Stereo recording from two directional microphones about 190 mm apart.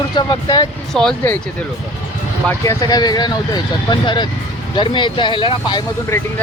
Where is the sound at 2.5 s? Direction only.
20° left (ahead or behind).